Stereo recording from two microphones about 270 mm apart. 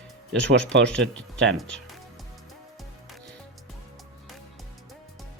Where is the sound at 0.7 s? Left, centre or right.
Right.